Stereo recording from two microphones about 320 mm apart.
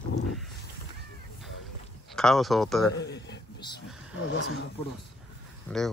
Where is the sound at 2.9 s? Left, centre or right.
Left.